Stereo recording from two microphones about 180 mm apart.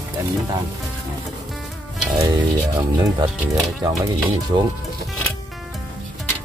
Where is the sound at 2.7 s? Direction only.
20° right (ahead or behind).